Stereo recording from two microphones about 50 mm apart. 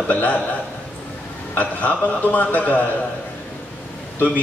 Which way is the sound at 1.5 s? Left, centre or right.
Left.